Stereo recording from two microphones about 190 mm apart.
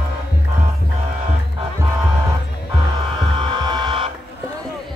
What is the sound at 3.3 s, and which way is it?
Hum, 25° right (ahead or behind).